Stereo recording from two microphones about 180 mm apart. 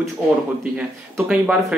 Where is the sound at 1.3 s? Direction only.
5° right (ahead or behind).